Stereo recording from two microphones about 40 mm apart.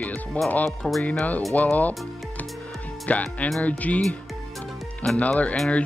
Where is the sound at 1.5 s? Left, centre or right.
Left.